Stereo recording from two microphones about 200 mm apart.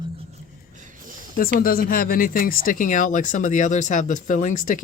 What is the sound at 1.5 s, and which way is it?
Speech, 45° left (ahead or behind).